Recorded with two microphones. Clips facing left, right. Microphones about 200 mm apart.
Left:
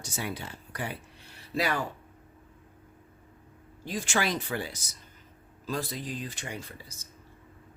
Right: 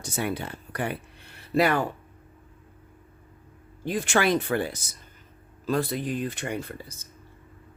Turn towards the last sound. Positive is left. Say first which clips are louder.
# right 8 dB
turn(degrees=-55)  # may be behind; listen again after turning